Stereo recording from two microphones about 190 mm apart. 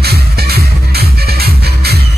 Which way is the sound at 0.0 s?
55° right (ahead or behind).